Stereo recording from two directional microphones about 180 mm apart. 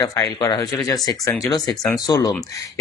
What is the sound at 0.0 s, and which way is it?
Speech, 20° left (ahead or behind).